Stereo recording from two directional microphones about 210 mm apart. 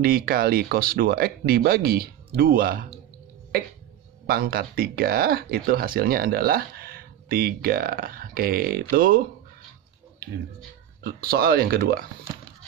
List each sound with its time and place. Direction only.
0.0 s speech: 45° right (ahead or behind)
4.3 s speech: 45° right (ahead or behind)
11.1 s speech: 45° right (ahead or behind)